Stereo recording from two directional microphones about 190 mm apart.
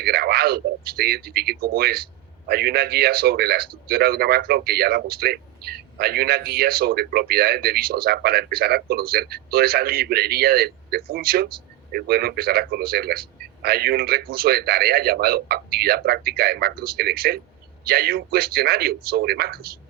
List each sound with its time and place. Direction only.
0.0 s speech: 55° right (ahead or behind)